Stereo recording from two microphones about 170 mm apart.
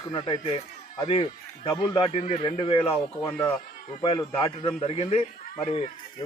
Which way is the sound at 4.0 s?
30° left (ahead or behind).